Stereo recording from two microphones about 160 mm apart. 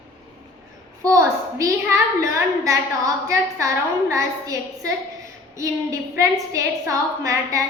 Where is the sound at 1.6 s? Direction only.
20° right (ahead or behind).